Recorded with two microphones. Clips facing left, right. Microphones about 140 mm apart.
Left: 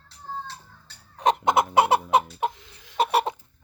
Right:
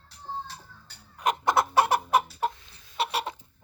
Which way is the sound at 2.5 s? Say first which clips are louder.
Left 5 dB; 90° left.